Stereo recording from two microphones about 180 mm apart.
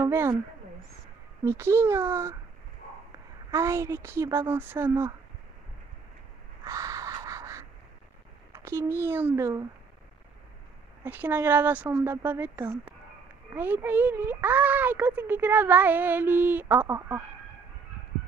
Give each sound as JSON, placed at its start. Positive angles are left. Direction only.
{"t": 0.0, "sound": "speech", "side_deg": -15}
{"t": 1.4, "sound": "speech", "side_deg": -15}
{"t": 3.5, "sound": "speech", "side_deg": -15}
{"t": 6.6, "sound": "a sound", "side_deg": -20}
{"t": 8.5, "sound": "a child's voice", "side_deg": -15}
{"t": 11.1, "sound": "speech", "side_deg": -10}